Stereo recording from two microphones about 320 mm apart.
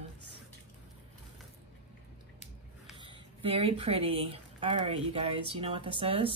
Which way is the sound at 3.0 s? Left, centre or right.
Centre.